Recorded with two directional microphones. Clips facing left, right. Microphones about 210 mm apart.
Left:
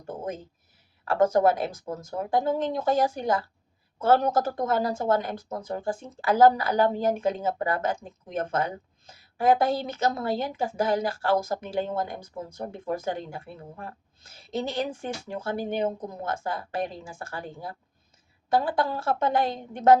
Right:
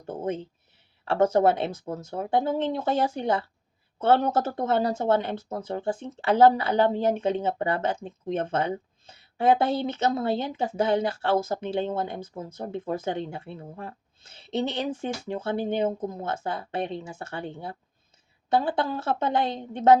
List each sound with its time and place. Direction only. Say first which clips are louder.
1.0 s speech: even; 25° right (ahead or behind)